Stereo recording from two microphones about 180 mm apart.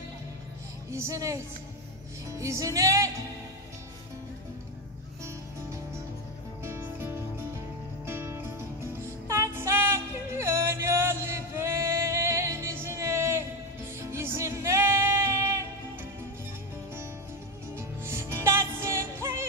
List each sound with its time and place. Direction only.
0.8 s music: 15° right (ahead or behind)
6.6 s music: 15° right (ahead or behind)
17.7 s music: 15° right (ahead or behind)